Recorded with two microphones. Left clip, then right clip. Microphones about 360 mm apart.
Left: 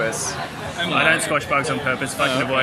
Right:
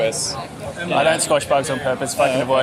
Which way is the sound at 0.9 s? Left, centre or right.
Right.